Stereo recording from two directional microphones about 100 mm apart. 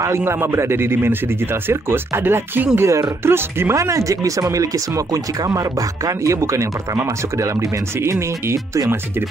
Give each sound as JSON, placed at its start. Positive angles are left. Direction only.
{"t": 0.0, "sound": "speech", "side_deg": -25}